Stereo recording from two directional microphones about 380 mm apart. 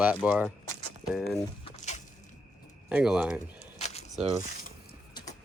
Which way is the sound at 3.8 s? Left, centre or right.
Centre.